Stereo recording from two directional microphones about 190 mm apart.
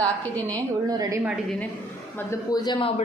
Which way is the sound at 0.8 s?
20° right (ahead or behind).